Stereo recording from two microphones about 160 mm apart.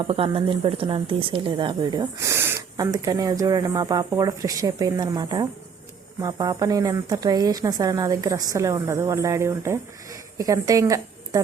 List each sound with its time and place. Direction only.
0.0 s a woman's voice: 35° right (ahead or behind)